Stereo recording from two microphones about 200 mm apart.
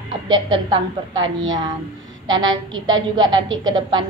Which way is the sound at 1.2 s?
75° right (ahead or behind).